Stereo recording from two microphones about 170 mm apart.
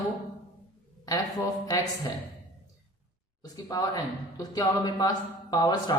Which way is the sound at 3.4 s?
20° left (ahead or behind).